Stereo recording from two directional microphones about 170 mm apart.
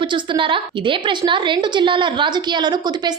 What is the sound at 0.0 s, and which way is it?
A woman's voice, 30° right (ahead or behind).